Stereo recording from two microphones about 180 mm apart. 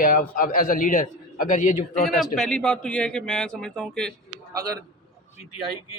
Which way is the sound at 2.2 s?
5° left (ahead or behind).